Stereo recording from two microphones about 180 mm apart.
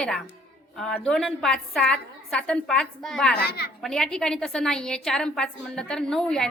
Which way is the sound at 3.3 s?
60° left (ahead or behind).